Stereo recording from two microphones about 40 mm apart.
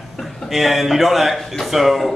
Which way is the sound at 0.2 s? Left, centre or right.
Centre.